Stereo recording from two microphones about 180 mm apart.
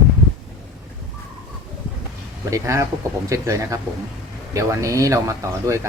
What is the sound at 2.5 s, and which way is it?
Speech, 15° right (ahead or behind).